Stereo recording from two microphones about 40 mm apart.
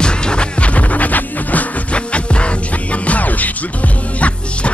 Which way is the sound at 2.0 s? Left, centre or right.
Left.